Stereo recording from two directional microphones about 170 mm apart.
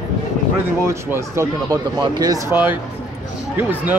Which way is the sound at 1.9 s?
25° right (ahead or behind).